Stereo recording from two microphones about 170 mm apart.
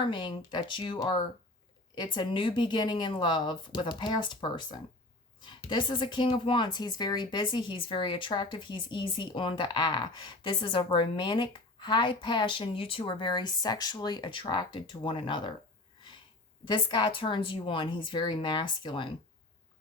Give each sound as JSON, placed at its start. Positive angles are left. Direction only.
{"t": 0.0, "sound": "a woman's voice", "side_deg": 30}
{"t": 16.6, "sound": "a woman's voice", "side_deg": 25}